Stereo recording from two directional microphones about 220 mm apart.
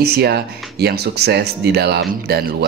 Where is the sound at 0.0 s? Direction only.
45° right (ahead or behind).